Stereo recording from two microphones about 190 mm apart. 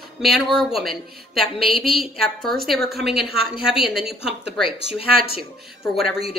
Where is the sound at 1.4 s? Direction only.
30° left (ahead or behind).